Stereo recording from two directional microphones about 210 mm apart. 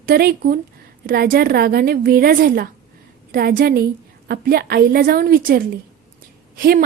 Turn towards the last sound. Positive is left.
turn(degrees=-45)  # may be behind; listen again after turning